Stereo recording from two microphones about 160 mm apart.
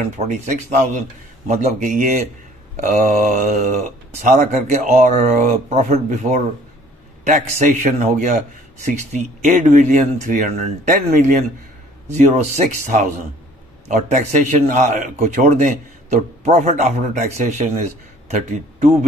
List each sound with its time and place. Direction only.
0.3 s a man's voice: 50° right (ahead or behind)
13.8 s a man's voice: 50° right (ahead or behind)